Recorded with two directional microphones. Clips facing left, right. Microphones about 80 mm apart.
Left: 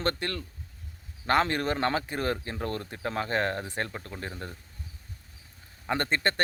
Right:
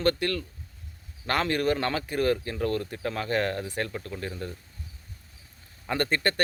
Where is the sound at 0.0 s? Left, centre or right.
Left.